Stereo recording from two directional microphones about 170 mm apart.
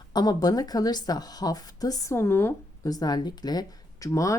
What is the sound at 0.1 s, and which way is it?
A woman's voice, 25° left (ahead or behind).